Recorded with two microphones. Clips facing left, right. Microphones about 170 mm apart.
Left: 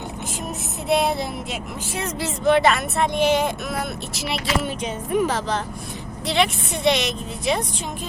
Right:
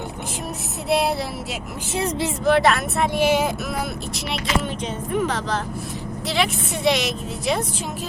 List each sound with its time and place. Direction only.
0.9 s speech: centre (ahead or behind)
2.0 s speech: 30° right (ahead or behind)
2.4 s speech: centre (ahead or behind)